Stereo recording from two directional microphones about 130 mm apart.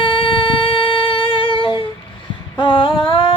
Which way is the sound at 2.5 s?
40° left (ahead or behind).